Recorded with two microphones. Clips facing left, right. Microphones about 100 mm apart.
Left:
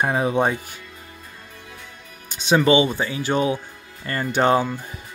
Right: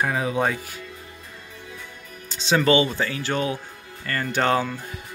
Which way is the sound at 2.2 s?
15° left (ahead or behind).